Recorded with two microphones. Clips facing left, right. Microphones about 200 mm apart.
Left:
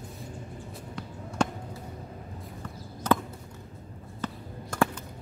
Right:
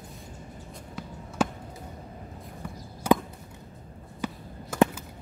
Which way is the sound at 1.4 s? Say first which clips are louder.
Right 1 dB; 5° right (ahead or behind).